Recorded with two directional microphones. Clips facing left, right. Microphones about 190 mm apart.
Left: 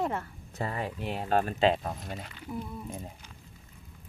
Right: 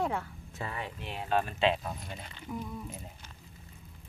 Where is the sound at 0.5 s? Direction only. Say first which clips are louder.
Left 5 dB; 40° left (ahead or behind).